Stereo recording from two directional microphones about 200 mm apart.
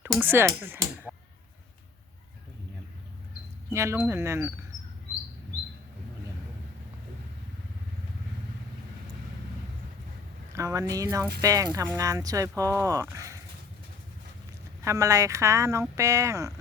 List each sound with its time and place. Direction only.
0.1 s speech: 10° right (ahead or behind)
3.7 s speech: 15° right (ahead or behind)
10.5 s speech: 15° right (ahead or behind)
14.8 s speech: 15° right (ahead or behind)